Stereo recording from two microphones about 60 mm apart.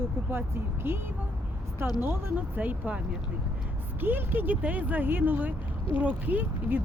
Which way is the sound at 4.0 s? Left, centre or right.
Right.